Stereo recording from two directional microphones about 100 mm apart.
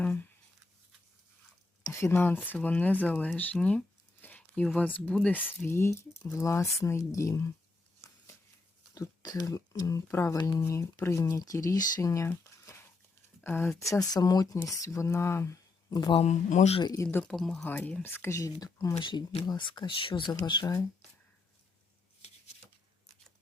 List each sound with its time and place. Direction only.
0.0 s a sound: 20° left (ahead or behind)
1.8 s speech: 30° left (ahead or behind)
9.0 s speech: 40° left (ahead or behind)
12.6 s a sound: 25° left (ahead or behind)
13.4 s speech: 20° left (ahead or behind)
16.1 s speech: 80° left
17.0 s speech: 20° left (ahead or behind)
17.2 s speech: 5° left (ahead or behind)
17.6 s speech: 20° left (ahead or behind); by 19.0 s 40° left (ahead or behind)
19.5 s speech: 50° left (ahead or behind)